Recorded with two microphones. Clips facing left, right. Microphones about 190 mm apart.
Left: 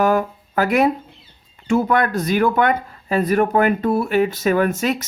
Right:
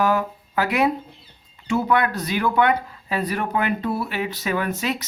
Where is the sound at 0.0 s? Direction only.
50° left (ahead or behind).